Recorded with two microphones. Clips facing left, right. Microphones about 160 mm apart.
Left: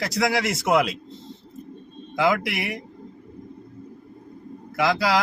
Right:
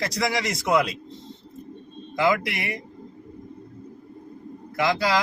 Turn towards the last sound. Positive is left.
turn(degrees=0)  # may be behind; listen again after turning